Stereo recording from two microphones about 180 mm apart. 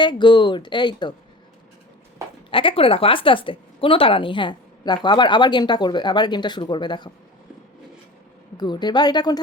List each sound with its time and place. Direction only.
0.0 s speech: 25° left (ahead or behind)
2.5 s speech: 30° left (ahead or behind)
8.5 s speech: 25° left (ahead or behind)